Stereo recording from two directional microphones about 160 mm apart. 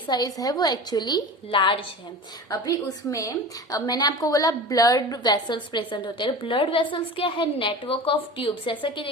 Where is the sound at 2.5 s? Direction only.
20° left (ahead or behind).